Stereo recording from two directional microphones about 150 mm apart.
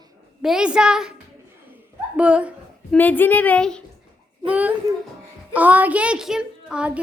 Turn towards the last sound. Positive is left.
turn(degrees=-5)  # may be behind; listen again after turning